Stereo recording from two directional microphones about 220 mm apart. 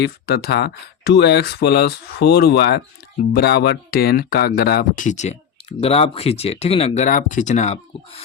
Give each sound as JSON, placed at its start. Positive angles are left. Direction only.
{"t": 0.0, "sound": "speech", "side_deg": 45}